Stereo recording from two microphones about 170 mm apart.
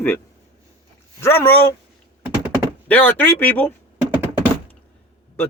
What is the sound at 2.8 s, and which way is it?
Speech, 10° left (ahead or behind).